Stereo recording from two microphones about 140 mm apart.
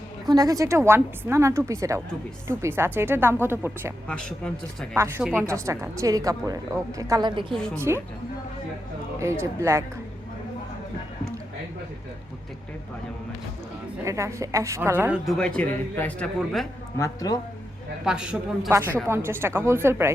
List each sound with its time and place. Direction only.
0.3 s a woman's voice: 25° right (ahead or behind)
4.1 s speech: 5° left (ahead or behind)
4.9 s a woman's voice: 15° right (ahead or behind); by 7.4 s 30° right (ahead or behind)
7.8 s a woman's voice: 20° right (ahead or behind)
9.1 s a woman's voice: 20° right (ahead or behind)
14.0 s a woman's voice: 20° right (ahead or behind)
15.3 s speech: 5° left (ahead or behind)
17.0 s speech: 25° left (ahead or behind)
18.0 s speech: 5° right (ahead or behind)
19.0 s speech: 15° right (ahead or behind)